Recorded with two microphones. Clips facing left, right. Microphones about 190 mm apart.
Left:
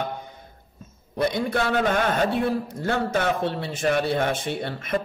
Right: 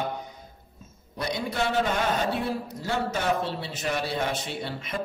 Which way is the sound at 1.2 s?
55° left (ahead or behind).